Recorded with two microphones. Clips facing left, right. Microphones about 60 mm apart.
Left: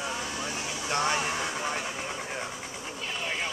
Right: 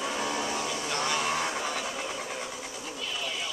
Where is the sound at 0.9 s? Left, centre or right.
Left.